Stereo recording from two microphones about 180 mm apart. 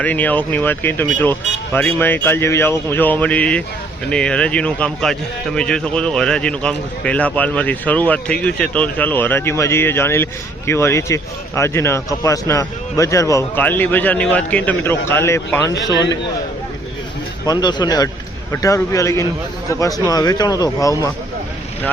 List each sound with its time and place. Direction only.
0.0 s a man's voice: 10° left (ahead or behind)
17.4 s a man's voice: 20° left (ahead or behind)